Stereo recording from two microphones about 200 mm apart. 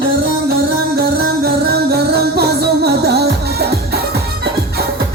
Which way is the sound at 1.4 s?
50° right (ahead or behind).